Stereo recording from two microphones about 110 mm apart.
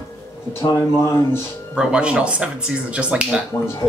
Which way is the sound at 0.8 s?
25° left (ahead or behind).